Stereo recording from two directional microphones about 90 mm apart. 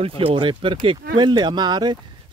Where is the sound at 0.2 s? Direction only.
75° right (ahead or behind).